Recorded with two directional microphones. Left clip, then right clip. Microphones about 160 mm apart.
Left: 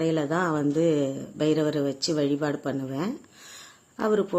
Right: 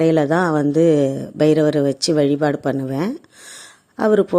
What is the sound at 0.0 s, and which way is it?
Speech, 50° right (ahead or behind).